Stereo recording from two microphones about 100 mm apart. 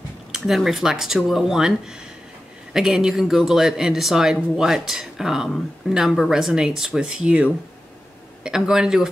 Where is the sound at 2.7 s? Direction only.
5° right (ahead or behind).